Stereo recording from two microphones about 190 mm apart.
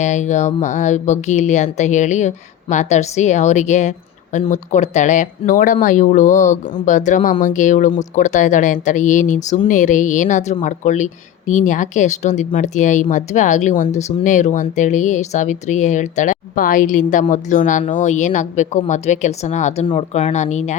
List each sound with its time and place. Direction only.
0.0 s speech: 40° left (ahead or behind)